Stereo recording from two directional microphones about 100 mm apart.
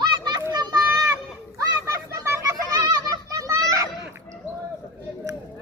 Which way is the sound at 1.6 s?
35° right (ahead or behind).